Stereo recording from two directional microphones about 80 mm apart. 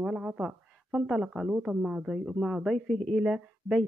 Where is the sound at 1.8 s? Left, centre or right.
Centre.